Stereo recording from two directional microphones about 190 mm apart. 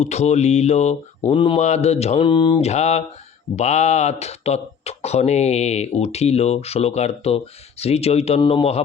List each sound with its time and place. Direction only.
0.0 s speech: 35° left (ahead or behind)